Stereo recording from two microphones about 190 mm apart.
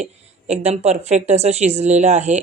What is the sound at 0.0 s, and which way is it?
Speech, 35° right (ahead or behind).